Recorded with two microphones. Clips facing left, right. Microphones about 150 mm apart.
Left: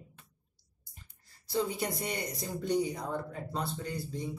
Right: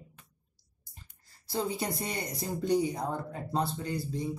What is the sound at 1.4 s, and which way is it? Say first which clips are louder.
Speech: even; 30° right (ahead or behind).